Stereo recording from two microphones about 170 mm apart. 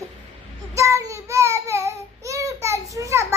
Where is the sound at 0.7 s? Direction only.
15° right (ahead or behind).